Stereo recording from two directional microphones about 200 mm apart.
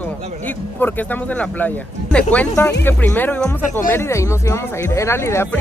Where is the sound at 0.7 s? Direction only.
10° left (ahead or behind).